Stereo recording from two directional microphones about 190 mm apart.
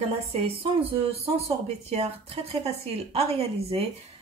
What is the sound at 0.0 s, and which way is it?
A woman's voice, 30° right (ahead or behind).